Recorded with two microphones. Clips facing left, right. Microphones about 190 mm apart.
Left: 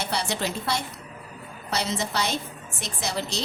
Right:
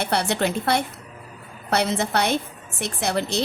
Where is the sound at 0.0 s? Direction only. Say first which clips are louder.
Right 6 dB; 60° right (ahead or behind).